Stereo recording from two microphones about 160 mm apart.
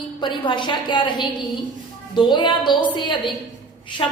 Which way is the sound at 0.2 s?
30° left (ahead or behind).